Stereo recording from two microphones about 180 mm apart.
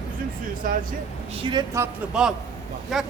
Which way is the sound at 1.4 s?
25° right (ahead or behind).